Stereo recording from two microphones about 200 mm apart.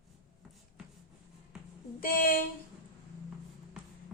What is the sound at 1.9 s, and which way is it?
Speech, 45° left (ahead or behind).